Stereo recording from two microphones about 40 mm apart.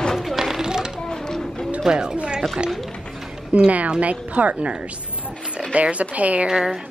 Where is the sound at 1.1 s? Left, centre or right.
Centre.